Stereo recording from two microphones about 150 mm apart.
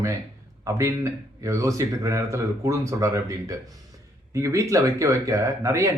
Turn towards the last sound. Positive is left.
turn(degrees=-20)  # may be behind; listen again after turning